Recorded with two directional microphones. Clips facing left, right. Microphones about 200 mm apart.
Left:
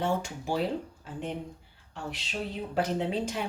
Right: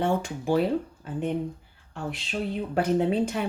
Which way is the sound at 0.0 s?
55° right (ahead or behind).